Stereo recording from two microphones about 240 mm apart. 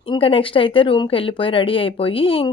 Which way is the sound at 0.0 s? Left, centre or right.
Left.